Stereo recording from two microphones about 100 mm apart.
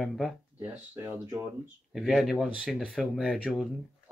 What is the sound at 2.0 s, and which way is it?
Speech, centre (ahead or behind).